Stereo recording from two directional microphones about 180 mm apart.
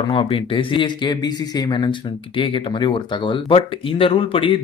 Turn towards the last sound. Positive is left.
turn(degrees=30)  # may be behind; listen again after turning